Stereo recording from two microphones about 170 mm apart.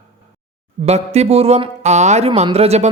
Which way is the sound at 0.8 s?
40° right (ahead or behind).